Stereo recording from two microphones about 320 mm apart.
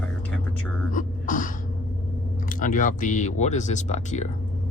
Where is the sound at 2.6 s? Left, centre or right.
Left.